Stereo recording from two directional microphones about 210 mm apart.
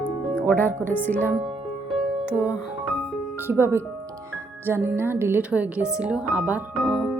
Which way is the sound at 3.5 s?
10° right (ahead or behind).